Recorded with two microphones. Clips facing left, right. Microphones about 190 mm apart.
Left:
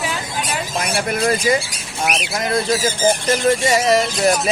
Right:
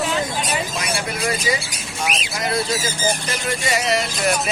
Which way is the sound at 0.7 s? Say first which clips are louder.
Left 4 dB; 55° left (ahead or behind).